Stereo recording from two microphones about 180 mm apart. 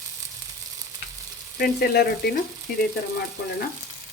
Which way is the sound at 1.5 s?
60° left (ahead or behind).